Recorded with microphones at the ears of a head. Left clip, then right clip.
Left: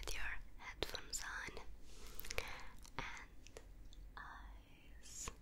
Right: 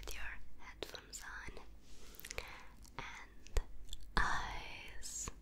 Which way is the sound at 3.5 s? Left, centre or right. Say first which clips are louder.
Right 11 dB; right.